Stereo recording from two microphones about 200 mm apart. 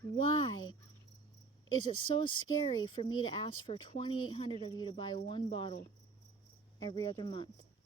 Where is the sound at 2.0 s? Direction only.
25° left (ahead or behind).